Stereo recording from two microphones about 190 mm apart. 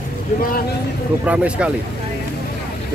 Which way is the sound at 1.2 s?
5° right (ahead or behind).